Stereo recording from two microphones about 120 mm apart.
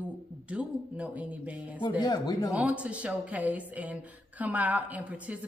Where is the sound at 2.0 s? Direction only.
35° left (ahead or behind).